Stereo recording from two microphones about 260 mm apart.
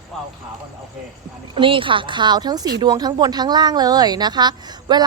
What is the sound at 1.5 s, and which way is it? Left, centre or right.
A woman's voice, centre.